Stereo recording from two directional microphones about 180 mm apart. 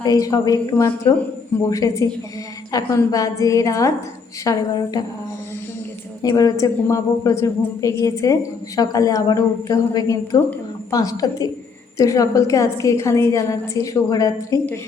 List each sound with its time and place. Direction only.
0.0 s a woman's voice: 20° left (ahead or behind)
6.2 s a woman's voice: 20° left (ahead or behind)